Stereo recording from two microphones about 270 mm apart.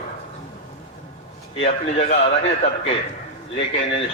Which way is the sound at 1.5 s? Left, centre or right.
Left.